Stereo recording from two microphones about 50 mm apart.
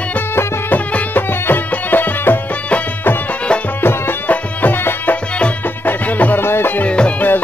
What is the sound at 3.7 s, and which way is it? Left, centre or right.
Music, left.